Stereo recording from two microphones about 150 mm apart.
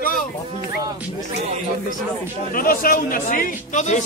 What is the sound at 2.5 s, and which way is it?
A man's voice, 70° left (ahead or behind).